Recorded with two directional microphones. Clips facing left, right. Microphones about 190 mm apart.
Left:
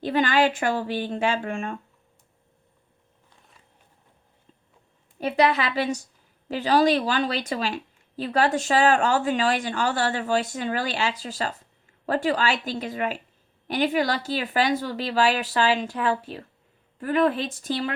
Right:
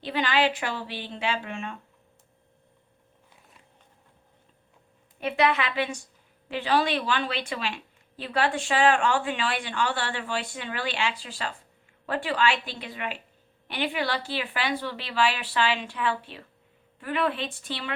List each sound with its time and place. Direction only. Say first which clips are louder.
0.0 s a woman's voice: left 4 dB; 45° left (ahead or behind)
5.2 s a woman's voice: left 3 dB; 35° left (ahead or behind)